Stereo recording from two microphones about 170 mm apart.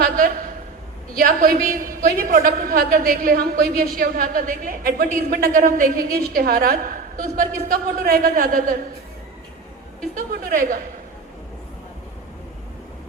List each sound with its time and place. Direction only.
0.0 s a sound: 55° right (ahead or behind)
1.1 s a woman's voice: 55° right (ahead or behind)
10.2 s a woman's voice: 55° right (ahead or behind)